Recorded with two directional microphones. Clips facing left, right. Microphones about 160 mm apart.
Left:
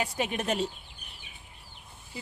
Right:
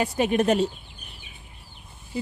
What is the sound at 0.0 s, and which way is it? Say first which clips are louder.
Speech: right 9 dB; 50° right (ahead or behind).